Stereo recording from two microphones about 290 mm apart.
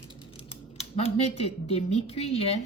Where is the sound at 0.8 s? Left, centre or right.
Left.